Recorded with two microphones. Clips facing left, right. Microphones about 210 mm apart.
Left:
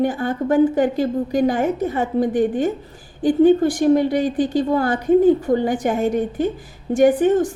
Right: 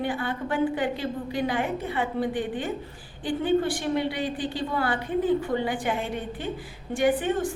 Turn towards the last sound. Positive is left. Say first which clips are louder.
# left 9 dB
turn(degrees=45)  # may be behind; listen again after turning